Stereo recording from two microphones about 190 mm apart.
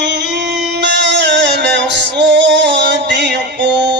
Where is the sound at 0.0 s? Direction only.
65° right (ahead or behind).